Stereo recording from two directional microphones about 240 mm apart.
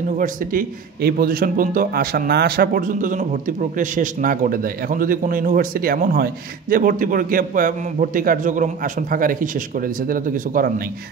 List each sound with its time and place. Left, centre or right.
0.2 s a man's voice: right